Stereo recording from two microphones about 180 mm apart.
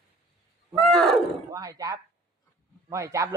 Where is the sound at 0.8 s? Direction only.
Centre (ahead or behind).